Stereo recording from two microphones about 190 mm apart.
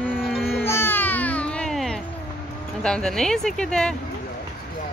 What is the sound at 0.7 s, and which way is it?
Music, 10° left (ahead or behind).